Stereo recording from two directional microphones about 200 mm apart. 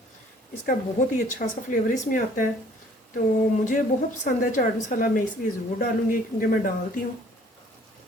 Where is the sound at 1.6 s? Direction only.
40° left (ahead or behind).